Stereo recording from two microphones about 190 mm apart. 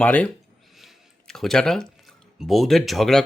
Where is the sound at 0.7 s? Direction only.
Centre (ahead or behind).